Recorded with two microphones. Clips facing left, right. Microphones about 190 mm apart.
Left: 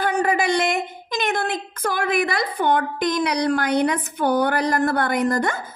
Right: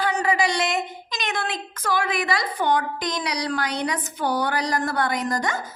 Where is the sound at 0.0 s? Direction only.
55° left (ahead or behind).